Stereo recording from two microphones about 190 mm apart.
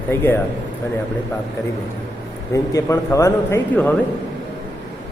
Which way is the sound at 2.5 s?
15° left (ahead or behind).